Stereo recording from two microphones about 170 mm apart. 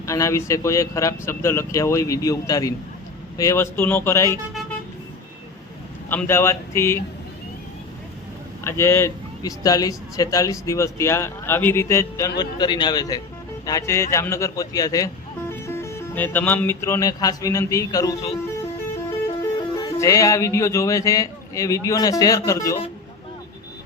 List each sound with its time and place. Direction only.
0.0 s a man's voice: 20° left (ahead or behind)
6.1 s a man's voice: 15° left (ahead or behind)
8.6 s a man's voice: 15° left (ahead or behind)
19.4 s speech: 25° left (ahead or behind)